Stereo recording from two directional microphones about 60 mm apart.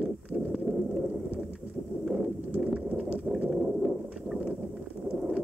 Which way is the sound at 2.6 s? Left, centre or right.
Centre.